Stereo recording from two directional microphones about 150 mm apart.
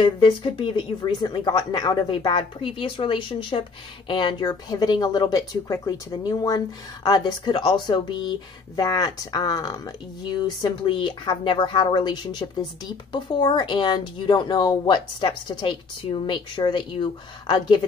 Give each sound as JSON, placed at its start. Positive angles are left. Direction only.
{"t": 0.0, "sound": "a woman's voice", "side_deg": 35}